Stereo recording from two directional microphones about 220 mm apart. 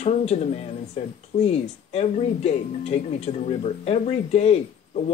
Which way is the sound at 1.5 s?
30° left (ahead or behind).